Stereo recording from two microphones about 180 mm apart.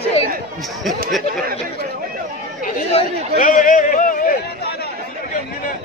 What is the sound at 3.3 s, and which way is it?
A man's voice, 45° left (ahead or behind).